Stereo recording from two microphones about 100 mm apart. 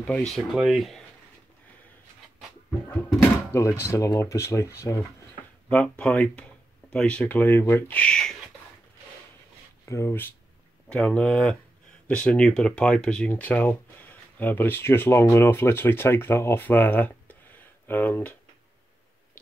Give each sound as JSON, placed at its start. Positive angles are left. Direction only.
{"t": 0.3, "sound": "speech", "side_deg": -5}
{"t": 2.9, "sound": "speech", "side_deg": 25}
{"t": 5.7, "sound": "speech", "side_deg": 15}
{"t": 9.8, "sound": "speech", "side_deg": 30}
{"t": 10.9, "sound": "speech", "side_deg": 10}